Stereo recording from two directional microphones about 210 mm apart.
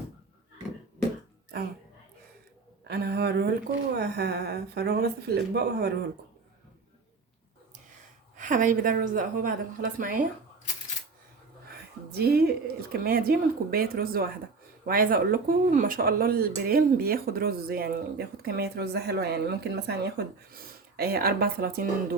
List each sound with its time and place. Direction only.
2.8 s speech: 50° right (ahead or behind)
8.4 s a woman's voice: 40° right (ahead or behind)
12.1 s speech: 50° right (ahead or behind)